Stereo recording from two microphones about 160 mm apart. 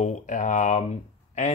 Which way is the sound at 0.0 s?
50° left (ahead or behind).